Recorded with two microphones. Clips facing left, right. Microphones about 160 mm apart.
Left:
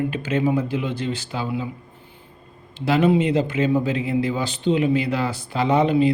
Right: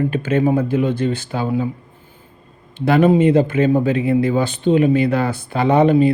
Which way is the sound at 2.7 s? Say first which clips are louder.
Right 4 dB; 55° right (ahead or behind).